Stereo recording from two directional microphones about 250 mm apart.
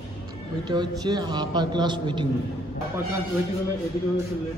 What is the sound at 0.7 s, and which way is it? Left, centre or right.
A man's voice, centre.